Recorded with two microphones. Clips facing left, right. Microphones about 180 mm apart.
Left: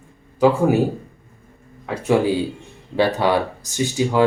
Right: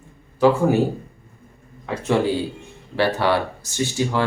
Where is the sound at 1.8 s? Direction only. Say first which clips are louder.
Left 2 dB; 10° left (ahead or behind).